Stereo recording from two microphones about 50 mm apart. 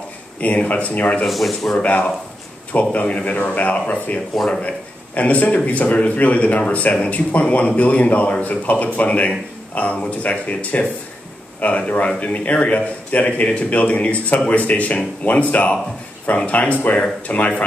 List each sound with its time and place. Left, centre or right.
0.4 s speech: left
1.2 s speech: centre
1.8 s a man's voice: left